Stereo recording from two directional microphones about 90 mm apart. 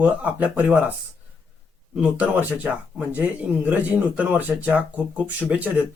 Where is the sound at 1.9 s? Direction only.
15° right (ahead or behind).